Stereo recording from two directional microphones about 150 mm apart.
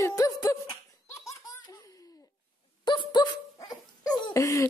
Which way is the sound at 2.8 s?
30° left (ahead or behind).